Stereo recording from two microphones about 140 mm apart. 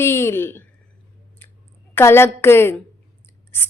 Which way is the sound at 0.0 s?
20° left (ahead or behind).